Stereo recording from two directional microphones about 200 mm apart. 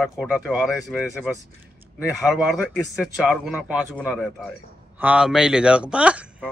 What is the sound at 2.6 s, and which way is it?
Speech, centre (ahead or behind).